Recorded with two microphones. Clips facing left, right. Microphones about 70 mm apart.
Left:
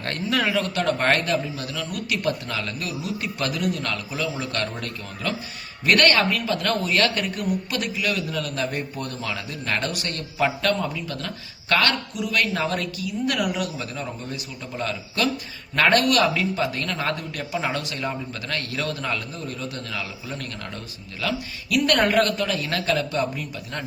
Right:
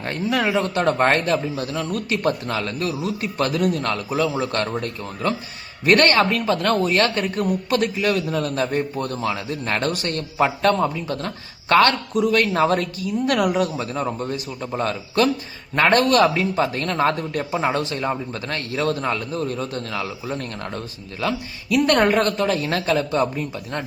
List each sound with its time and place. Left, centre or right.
0.0 s a man's voice: centre; by 23.8 s right